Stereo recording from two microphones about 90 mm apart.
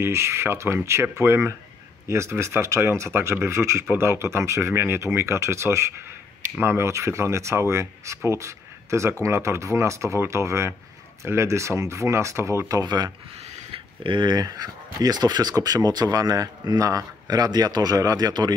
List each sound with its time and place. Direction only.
0.0 s speech: 30° right (ahead or behind)
12.8 s speech: 50° right (ahead or behind)
14.0 s speech: 65° right (ahead or behind)
14.3 s speech: 45° right (ahead or behind)